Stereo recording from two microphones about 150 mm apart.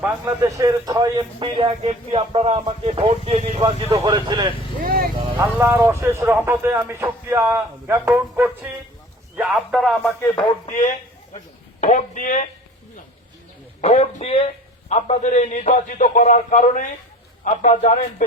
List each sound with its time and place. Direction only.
0.3 s speech: 20° right (ahead or behind)
4.8 s vehicle: 80° right
5.5 s a man's voice: 20° right (ahead or behind)
9.3 s speech: 5° right (ahead or behind)
10.7 s a man's voice: 50° left (ahead or behind)
13.8 s a man's voice: 45° left (ahead or behind)
14.8 s a man's voice: 50° left (ahead or behind)